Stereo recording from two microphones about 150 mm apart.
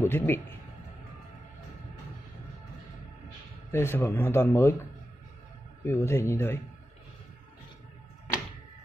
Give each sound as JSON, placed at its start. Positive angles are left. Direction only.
{"t": 0.0, "sound": "a man's voice", "side_deg": 15}
{"t": 3.7, "sound": "speech", "side_deg": 15}
{"t": 5.9, "sound": "speech", "side_deg": 15}